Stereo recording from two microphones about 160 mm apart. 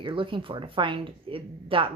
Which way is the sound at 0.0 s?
30° right (ahead or behind).